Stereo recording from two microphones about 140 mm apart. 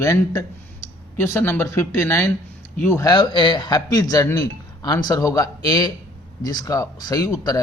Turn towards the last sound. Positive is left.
turn(degrees=25)  # may be behind; listen again after turning